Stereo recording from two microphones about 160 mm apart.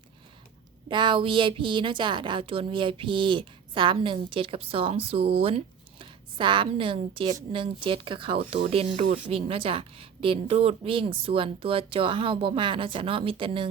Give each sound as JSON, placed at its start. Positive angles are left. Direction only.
{"t": 0.9, "sound": "a woman's voice", "side_deg": -30}